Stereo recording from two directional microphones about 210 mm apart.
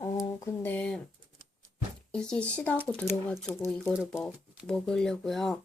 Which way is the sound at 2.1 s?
5° left (ahead or behind).